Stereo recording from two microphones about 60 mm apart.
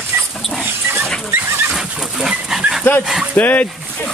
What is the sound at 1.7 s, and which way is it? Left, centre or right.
Dog, centre.